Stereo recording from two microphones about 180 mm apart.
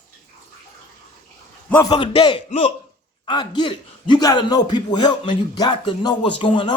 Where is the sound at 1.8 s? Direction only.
25° left (ahead or behind).